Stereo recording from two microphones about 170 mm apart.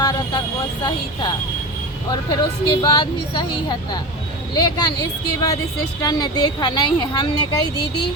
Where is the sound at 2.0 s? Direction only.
25° left (ahead or behind).